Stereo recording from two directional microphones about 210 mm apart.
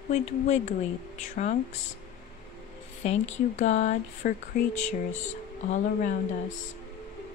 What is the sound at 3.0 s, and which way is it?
Speech, 30° left (ahead or behind).